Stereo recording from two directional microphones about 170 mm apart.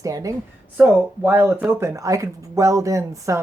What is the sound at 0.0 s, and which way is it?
A woman's voice, 20° right (ahead or behind).